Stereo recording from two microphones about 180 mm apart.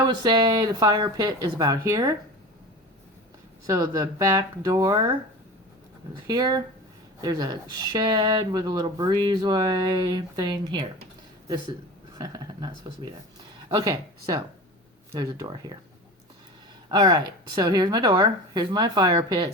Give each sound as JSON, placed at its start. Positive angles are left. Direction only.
{"t": 0.0, "sound": "speech", "side_deg": -20}
{"t": 3.7, "sound": "speech", "side_deg": -15}
{"t": 6.2, "sound": "speech", "side_deg": -20}
{"t": 12.1, "sound": "speech", "side_deg": -20}
{"t": 16.9, "sound": "speech", "side_deg": -20}